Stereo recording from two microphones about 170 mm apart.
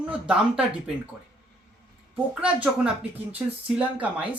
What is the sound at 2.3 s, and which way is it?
Speech, 5° right (ahead or behind).